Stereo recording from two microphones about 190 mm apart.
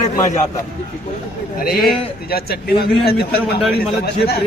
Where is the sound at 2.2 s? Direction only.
55° left (ahead or behind).